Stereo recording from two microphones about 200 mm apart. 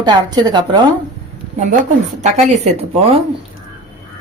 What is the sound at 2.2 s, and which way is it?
Speech, 35° right (ahead or behind).